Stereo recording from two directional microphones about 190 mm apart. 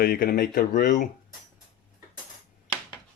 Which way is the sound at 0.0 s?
50° left (ahead or behind).